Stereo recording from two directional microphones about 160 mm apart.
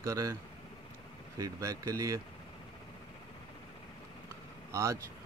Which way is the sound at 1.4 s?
20° right (ahead or behind).